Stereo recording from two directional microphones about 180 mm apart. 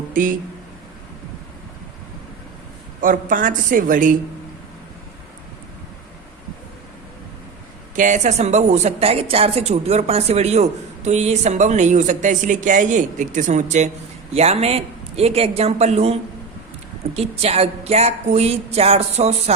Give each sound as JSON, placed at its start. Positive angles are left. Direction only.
{"t": 0.1, "sound": "speech", "side_deg": -50}
{"t": 3.0, "sound": "a woman's voice", "side_deg": -50}
{"t": 7.9, "sound": "speech", "side_deg": -45}
{"t": 17.2, "sound": "speech", "side_deg": -35}